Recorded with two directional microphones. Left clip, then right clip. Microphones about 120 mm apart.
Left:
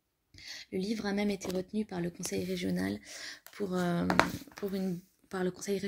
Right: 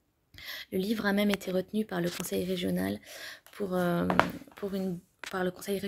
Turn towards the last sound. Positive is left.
turn(degrees=-10)  # may be behind; listen again after turning